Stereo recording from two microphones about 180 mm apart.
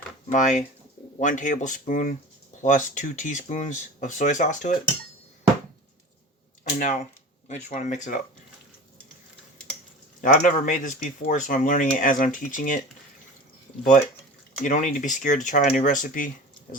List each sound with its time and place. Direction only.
0.3 s speech: 45° left (ahead or behind)
6.7 s speech: 45° left (ahead or behind)
10.2 s speech: 45° left (ahead or behind)
14.6 s speech: 45° left (ahead or behind)